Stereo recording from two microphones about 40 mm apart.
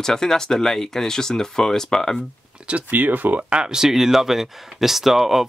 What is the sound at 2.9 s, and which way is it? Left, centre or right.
Speech, right.